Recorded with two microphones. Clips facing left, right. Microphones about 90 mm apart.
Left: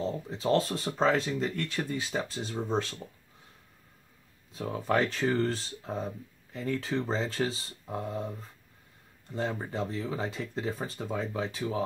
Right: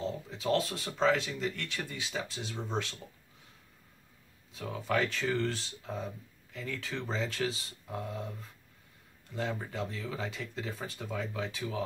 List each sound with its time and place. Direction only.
0.0 s speech: 35° left (ahead or behind)
4.6 s speech: 40° left (ahead or behind)
9.3 s speech: 35° left (ahead or behind)